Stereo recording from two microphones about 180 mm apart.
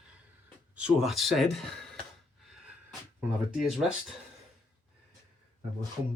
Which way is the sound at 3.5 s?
Centre (ahead or behind).